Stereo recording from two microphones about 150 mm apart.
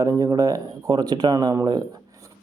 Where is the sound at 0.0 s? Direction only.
20° right (ahead or behind).